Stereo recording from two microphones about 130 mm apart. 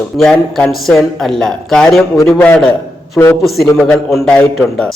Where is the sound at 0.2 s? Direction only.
5° left (ahead or behind).